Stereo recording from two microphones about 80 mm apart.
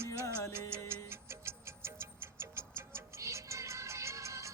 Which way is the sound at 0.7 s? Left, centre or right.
Right.